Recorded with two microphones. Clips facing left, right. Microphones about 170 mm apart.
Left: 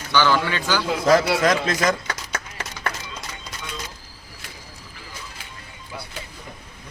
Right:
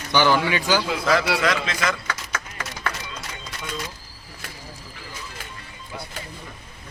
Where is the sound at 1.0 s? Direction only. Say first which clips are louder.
Left 5 dB; 45° left (ahead or behind).